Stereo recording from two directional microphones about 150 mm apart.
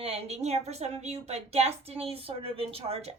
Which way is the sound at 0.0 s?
45° right (ahead or behind).